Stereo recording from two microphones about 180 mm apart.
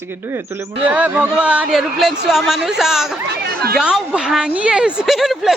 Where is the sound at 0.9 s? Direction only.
5° right (ahead or behind).